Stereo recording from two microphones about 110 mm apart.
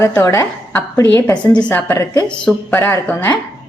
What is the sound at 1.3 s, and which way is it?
Speech, 10° left (ahead or behind).